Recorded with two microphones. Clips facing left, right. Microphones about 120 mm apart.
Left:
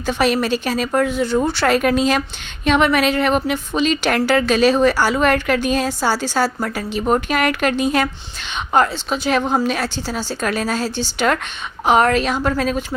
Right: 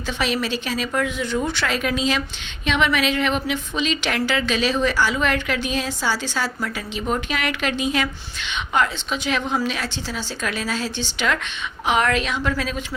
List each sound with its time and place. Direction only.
0.0 s a woman's voice: 45° left (ahead or behind)